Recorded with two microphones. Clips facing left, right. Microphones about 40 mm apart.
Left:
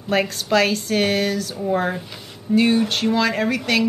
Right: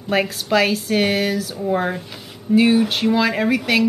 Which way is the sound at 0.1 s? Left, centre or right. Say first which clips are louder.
Right 1 dB; centre.